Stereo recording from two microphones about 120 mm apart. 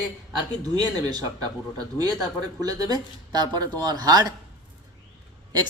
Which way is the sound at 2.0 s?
35° right (ahead or behind).